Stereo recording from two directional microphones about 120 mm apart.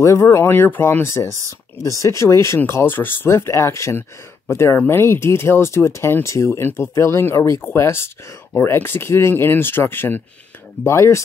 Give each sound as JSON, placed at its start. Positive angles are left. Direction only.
{"t": 0.0, "sound": "speech", "side_deg": 25}